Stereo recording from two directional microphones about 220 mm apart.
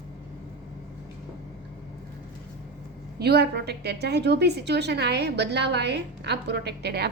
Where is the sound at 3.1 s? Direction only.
45° right (ahead or behind).